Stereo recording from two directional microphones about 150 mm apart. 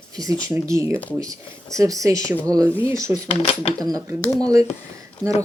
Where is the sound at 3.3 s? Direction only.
45° left (ahead or behind).